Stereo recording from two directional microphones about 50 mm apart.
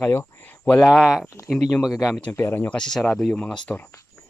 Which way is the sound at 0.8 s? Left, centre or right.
Centre.